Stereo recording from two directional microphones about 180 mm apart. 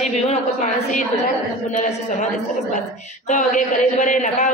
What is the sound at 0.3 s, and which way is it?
A man's voice, 40° left (ahead or behind).